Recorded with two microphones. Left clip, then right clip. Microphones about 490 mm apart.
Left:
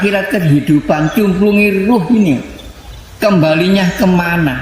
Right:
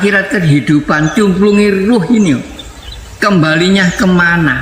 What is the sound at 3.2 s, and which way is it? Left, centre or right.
A man's voice, left.